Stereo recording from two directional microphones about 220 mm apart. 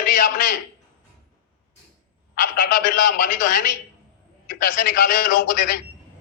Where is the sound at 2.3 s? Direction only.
40° left (ahead or behind).